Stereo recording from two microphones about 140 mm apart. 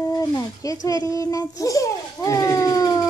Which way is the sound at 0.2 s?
25° left (ahead or behind).